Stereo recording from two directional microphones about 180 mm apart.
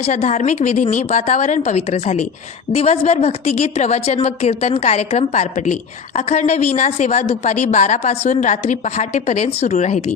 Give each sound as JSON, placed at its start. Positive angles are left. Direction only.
{"t": 0.0, "sound": "a woman's voice", "side_deg": 40}